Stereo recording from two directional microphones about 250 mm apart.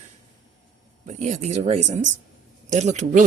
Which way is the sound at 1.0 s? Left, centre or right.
Right.